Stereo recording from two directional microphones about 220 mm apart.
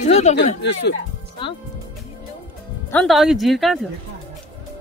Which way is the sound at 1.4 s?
20° left (ahead or behind).